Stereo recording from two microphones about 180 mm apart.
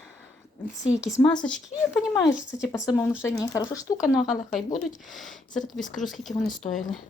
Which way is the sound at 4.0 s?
Centre (ahead or behind).